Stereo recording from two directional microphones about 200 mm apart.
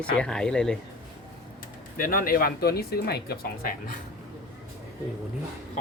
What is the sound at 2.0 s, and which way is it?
Speech, 45° left (ahead or behind).